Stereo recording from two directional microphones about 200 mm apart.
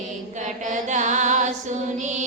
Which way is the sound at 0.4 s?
40° right (ahead or behind).